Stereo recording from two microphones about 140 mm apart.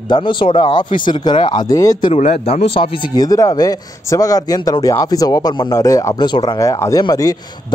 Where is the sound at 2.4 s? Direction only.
45° left (ahead or behind).